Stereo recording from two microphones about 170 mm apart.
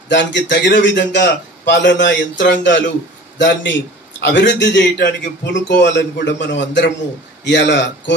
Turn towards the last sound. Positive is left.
turn(degrees=90)